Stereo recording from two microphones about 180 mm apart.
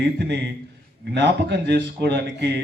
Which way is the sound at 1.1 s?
70° right (ahead or behind).